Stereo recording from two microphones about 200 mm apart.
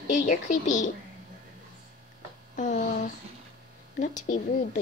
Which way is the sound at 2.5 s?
40° left (ahead or behind).